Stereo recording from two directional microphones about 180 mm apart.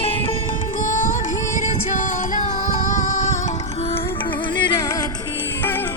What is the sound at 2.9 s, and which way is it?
Music, 40° left (ahead or behind).